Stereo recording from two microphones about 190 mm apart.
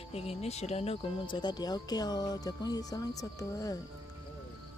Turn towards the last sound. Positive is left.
turn(degrees=20)  # may be behind; listen again after turning